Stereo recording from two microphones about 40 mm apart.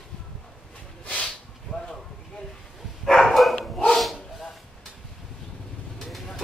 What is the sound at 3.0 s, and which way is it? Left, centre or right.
Dog, centre.